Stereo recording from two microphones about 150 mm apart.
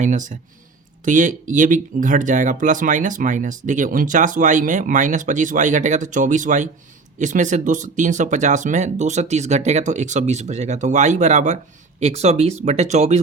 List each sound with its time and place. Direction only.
0.0 s speech: 55° right (ahead or behind)